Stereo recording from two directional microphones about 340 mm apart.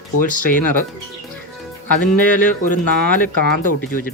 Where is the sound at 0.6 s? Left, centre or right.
Left.